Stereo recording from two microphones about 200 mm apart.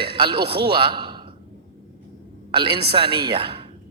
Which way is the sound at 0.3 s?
25° right (ahead or behind).